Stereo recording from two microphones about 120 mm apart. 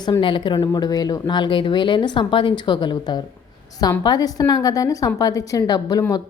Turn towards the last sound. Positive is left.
turn(degrees=35)  # may be behind; listen again after turning